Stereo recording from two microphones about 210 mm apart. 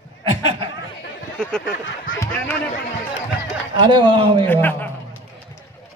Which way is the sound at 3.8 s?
20° right (ahead or behind).